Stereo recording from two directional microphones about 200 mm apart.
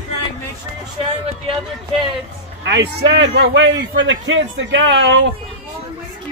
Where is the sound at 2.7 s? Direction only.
60° right (ahead or behind).